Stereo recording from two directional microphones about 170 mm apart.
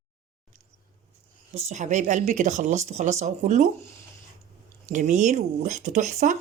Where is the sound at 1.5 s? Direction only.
40° right (ahead or behind).